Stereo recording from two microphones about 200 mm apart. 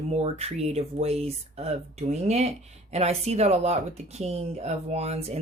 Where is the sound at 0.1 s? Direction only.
30° right (ahead or behind).